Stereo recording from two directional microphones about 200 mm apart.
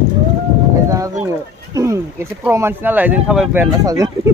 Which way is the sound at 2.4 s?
10° right (ahead or behind).